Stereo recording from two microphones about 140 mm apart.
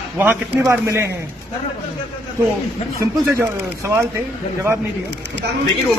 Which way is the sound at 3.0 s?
20° right (ahead or behind).